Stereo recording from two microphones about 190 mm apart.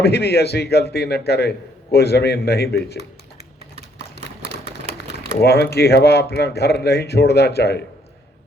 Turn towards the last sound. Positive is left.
turn(degrees=60)  # may be behind; listen again after turning